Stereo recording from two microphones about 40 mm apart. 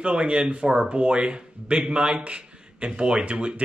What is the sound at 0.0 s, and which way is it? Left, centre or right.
A man's voice, right.